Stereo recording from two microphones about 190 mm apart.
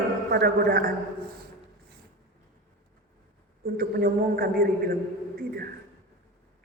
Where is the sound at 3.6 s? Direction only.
50° right (ahead or behind).